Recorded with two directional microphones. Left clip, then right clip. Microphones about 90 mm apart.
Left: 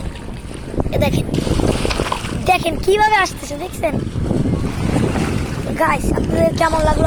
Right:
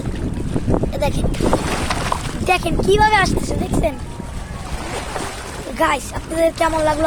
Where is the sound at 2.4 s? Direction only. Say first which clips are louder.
Left 1 dB; 15° left (ahead or behind).